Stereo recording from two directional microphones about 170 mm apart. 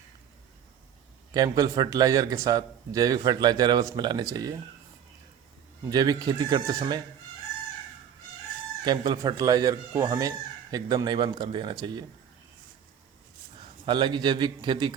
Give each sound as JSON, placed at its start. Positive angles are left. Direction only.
{"t": 1.3, "sound": "speech", "side_deg": -20}
{"t": 5.9, "sound": "speech", "side_deg": -25}
{"t": 8.8, "sound": "speech", "side_deg": -25}
{"t": 13.8, "sound": "speech", "side_deg": -30}